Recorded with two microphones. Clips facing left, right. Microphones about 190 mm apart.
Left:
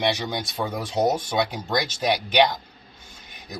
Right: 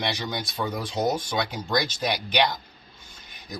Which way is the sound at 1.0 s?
30° left (ahead or behind).